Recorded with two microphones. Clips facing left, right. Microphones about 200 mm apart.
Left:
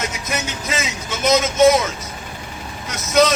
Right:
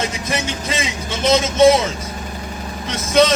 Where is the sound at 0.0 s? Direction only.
30° right (ahead or behind).